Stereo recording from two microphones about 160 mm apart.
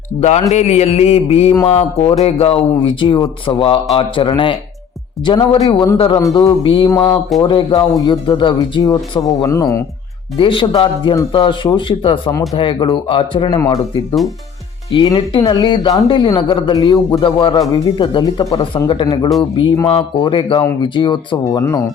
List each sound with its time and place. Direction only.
0.2 s speech: 45° left (ahead or behind); by 6.4 s 20° left (ahead or behind)
6.4 s speech: 30° left (ahead or behind)
10.3 s speech: 30° left (ahead or behind)